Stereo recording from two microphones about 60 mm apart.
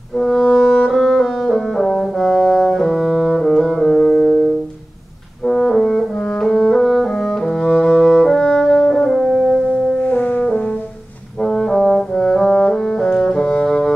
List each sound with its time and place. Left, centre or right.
0.2 s music: centre
5.5 s french horn: centre
9.9 s french horn: left
11.4 s brass instrument: centre